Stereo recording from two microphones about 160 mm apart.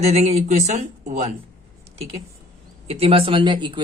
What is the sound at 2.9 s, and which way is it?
Speech, 35° right (ahead or behind).